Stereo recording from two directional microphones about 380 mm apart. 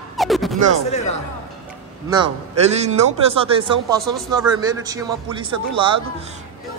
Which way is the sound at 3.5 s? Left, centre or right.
Centre.